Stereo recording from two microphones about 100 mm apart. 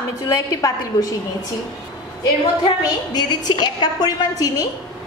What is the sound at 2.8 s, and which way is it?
A woman's voice, 45° left (ahead or behind).